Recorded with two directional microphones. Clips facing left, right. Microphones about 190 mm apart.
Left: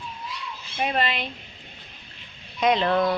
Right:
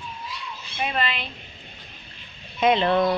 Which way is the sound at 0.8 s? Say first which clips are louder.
Left 2 dB; 45° left (ahead or behind).